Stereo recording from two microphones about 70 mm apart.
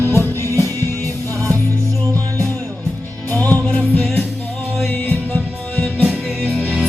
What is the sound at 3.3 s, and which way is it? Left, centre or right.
Music, left.